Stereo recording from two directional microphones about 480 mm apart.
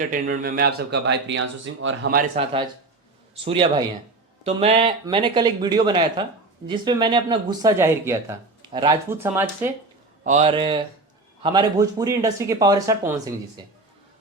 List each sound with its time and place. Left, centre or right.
0.1 s speech: centre